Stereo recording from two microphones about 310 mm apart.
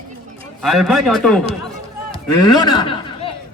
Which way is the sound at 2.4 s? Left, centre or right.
Centre.